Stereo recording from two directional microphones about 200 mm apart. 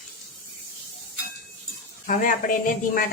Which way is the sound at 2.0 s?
40° left (ahead or behind).